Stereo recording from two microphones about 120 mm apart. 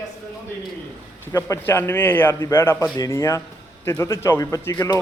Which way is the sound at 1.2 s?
20° left (ahead or behind).